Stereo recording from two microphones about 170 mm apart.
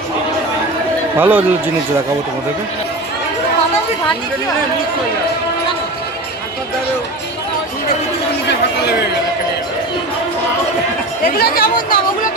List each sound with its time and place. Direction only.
1.2 s speech: 10° right (ahead or behind)
11.3 s speech: 60° left (ahead or behind)